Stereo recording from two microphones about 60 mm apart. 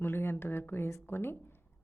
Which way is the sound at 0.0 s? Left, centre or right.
Left.